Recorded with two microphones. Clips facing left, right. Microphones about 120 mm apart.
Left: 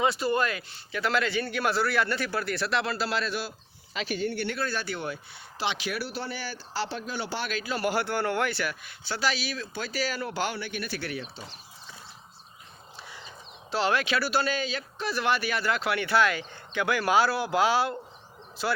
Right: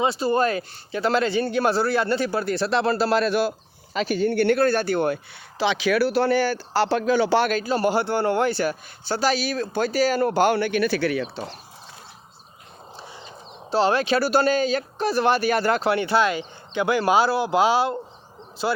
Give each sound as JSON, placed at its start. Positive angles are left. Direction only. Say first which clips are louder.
{"t": 0.0, "sound": "speech", "louder": "right 5 dB", "side_deg": -30}
{"t": 3.9, "sound": "speech", "louder": "right 9 dB", "side_deg": -40}
{"t": 7.5, "sound": "speech", "louder": "right 8 dB", "side_deg": -40}
{"t": 7.9, "sound": "speech", "louder": "right 5 dB", "side_deg": -25}
{"t": 13.0, "sound": "speech", "louder": "right 3 dB", "side_deg": -30}